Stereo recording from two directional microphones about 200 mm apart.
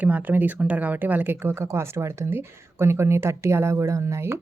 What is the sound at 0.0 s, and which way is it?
A woman's voice, 10° right (ahead or behind).